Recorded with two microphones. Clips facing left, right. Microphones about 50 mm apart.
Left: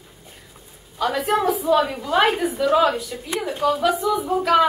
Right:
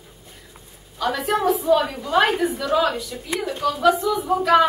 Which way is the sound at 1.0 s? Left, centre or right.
Left.